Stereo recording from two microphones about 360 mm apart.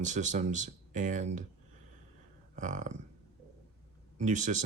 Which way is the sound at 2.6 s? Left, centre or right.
Right.